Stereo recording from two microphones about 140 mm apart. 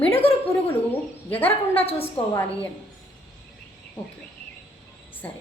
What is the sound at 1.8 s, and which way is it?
Speech, 45° left (ahead or behind).